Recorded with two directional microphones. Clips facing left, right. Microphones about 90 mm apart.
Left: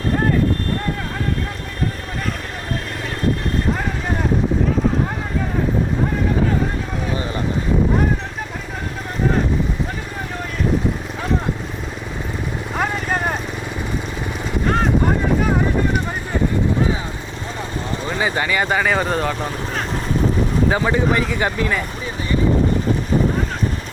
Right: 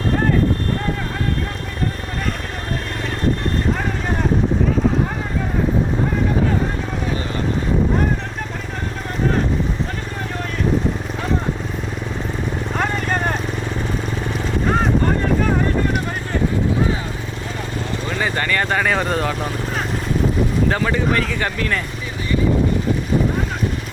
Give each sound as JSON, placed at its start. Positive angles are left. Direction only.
{"t": 12.7, "sound": "vehicle", "side_deg": 5}
{"t": 15.0, "sound": "vehicle", "side_deg": 10}
{"t": 18.0, "sound": "speech", "side_deg": 15}
{"t": 20.7, "sound": "speech", "side_deg": 15}